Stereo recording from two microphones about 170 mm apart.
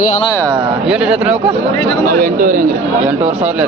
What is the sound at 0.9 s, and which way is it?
Speech, 5° right (ahead or behind).